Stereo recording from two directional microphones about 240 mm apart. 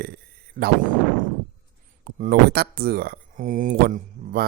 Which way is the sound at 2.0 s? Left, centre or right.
Right.